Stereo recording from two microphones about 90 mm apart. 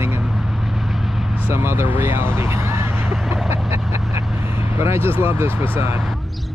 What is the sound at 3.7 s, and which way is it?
Vehicle, 30° right (ahead or behind).